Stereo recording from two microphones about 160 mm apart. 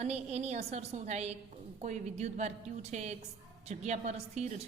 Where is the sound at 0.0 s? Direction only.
40° right (ahead or behind).